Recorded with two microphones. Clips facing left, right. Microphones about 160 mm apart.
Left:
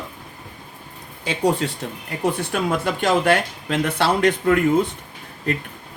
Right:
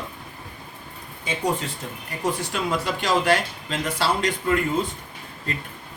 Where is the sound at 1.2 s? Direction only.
70° left (ahead or behind).